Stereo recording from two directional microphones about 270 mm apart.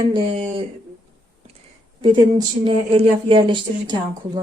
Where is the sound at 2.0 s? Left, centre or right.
Centre.